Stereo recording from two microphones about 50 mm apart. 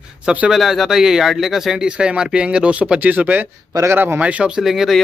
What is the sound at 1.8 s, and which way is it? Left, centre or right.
Speech, centre.